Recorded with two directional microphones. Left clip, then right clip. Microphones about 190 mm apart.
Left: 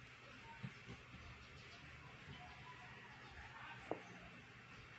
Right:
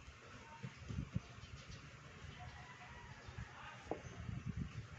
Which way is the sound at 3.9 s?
15° right (ahead or behind).